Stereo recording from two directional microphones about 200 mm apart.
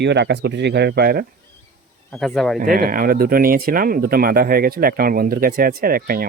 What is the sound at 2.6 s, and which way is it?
Speech, 45° right (ahead or behind).